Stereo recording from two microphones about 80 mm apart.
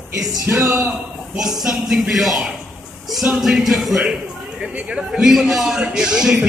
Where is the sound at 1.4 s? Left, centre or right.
Centre.